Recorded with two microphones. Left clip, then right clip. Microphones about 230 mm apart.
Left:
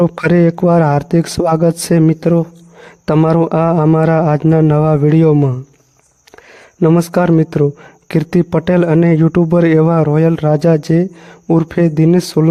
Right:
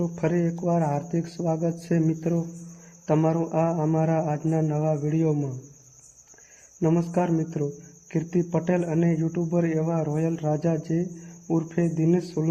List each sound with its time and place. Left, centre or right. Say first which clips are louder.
0.0 s speech: left 14 dB; left
6.8 s speech: left 12 dB; left